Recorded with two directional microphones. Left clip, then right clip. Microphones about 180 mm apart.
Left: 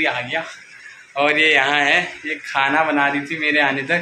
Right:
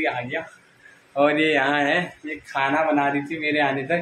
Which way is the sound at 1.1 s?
40° right (ahead or behind).